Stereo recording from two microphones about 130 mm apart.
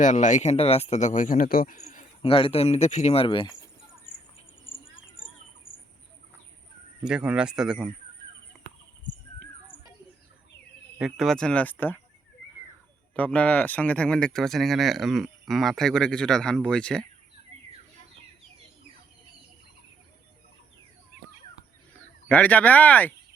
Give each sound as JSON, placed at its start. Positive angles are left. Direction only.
{"t": 0.0, "sound": "speech", "side_deg": 70}
{"t": 2.2, "sound": "speech", "side_deg": 45}
{"t": 7.0, "sound": "speech", "side_deg": -5}
{"t": 8.5, "sound": "a sound", "side_deg": 0}
{"t": 10.9, "sound": "speech", "side_deg": 0}
{"t": 13.1, "sound": "speech", "side_deg": 10}
{"t": 22.3, "sound": "speech", "side_deg": 10}